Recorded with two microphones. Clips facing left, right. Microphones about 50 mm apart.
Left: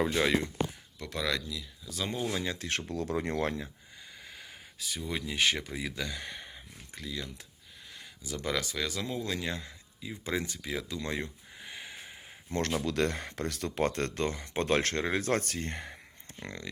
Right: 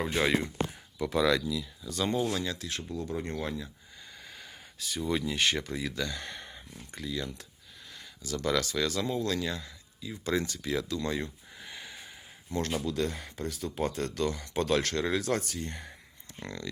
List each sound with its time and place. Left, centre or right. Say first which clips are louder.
0.2 s speech: even; centre
2.3 s speech: right 1 dB; left
2.6 s speech: left 4 dB; left
2.9 s speech: left 2 dB; left
4.2 s speech: even; centre
7.9 s speech: right 3 dB; centre
9.2 s speech: right 4 dB; centre
9.5 s speech: even; left
11.5 s a sound: even; centre
12.5 s speech: even; left
12.8 s speech: left 2 dB; left
16.4 s speech: right 2 dB; left